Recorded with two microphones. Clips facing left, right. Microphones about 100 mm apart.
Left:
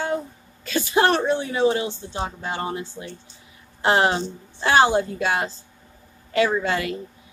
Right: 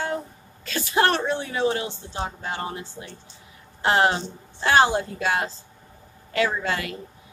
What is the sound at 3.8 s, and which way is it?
A woman's voice, 20° left (ahead or behind).